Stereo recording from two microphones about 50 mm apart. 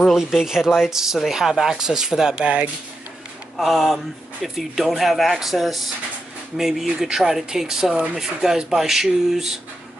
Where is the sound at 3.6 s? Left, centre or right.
Centre.